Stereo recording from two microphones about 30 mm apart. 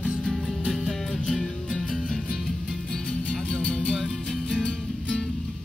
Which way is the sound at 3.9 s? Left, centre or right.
Centre.